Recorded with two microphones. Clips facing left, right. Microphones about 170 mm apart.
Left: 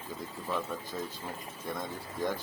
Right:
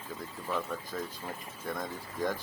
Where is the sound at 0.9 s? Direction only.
20° left (ahead or behind).